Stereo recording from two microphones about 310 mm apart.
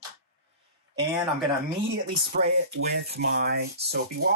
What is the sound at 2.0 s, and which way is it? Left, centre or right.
Speech, right.